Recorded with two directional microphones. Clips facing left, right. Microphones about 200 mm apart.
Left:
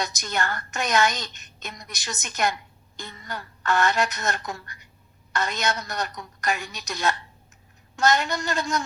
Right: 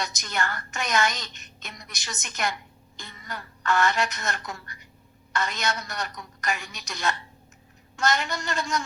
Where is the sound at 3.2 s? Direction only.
35° left (ahead or behind).